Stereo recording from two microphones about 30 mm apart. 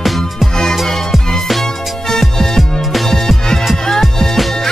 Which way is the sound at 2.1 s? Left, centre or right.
Centre.